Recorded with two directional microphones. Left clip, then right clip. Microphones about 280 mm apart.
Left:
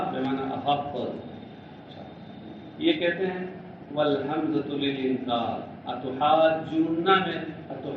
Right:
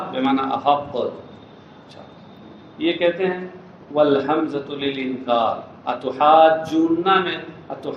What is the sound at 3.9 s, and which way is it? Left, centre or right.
A man's voice, right.